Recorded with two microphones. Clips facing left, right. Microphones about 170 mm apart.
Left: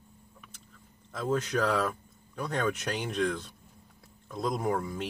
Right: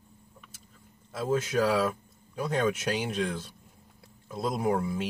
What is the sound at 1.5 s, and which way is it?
Speech, 25° right (ahead or behind).